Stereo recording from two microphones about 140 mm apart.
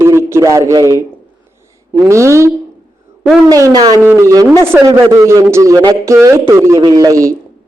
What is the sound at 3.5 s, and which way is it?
A man's voice, 25° right (ahead or behind).